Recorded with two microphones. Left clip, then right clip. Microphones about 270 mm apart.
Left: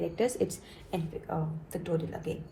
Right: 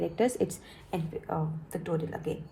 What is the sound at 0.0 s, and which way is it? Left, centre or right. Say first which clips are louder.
A woman's voice: right 1 dB; right.